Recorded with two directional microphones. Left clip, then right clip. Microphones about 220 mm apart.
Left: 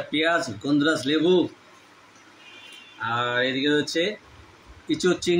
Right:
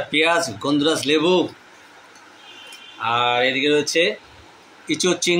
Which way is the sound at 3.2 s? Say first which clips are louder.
Right 5 dB; 35° right (ahead or behind).